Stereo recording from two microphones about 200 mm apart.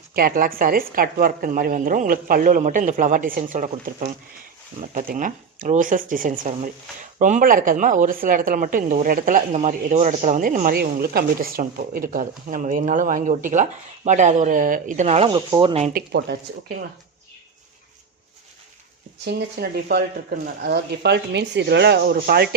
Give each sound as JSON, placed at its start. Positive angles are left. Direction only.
{"t": 0.1, "sound": "a woman's voice", "side_deg": -45}
{"t": 15.9, "sound": "a woman's voice", "side_deg": -50}
{"t": 19.2, "sound": "a woman's voice", "side_deg": -55}